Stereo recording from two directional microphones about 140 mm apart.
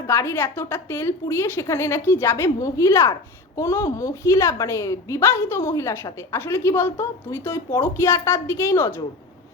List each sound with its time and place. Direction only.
0.1 s a woman's voice: 20° left (ahead or behind)